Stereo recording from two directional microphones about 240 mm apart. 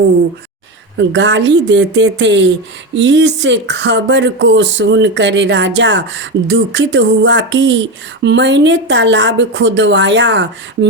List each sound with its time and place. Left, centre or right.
0.9 s speech: right